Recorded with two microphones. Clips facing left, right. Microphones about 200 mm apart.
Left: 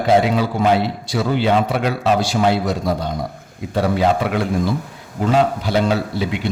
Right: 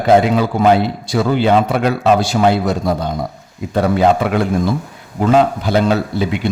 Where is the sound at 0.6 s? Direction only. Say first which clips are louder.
Right 5 dB; 55° right (ahead or behind).